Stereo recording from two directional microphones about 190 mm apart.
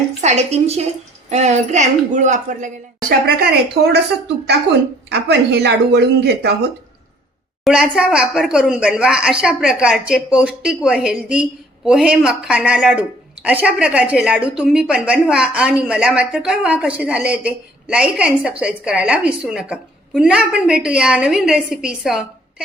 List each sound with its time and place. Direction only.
0.2 s a woman's voice: 35° right (ahead or behind)
4.4 s a woman's voice: 60° right (ahead or behind)
7.6 s a woman's voice: 5° right (ahead or behind)